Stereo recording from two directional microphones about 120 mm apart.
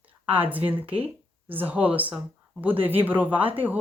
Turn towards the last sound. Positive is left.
turn(degrees=-15)  # may be behind; listen again after turning